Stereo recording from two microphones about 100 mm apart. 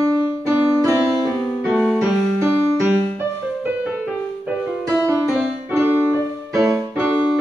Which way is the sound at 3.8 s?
10° right (ahead or behind).